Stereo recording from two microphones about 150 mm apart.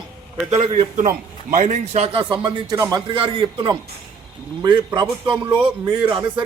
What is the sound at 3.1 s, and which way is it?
Speech, 35° right (ahead or behind).